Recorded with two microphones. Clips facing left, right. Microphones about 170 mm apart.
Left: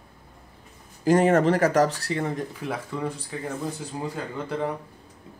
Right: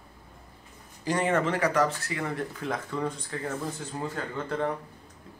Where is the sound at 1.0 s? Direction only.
45° left (ahead or behind).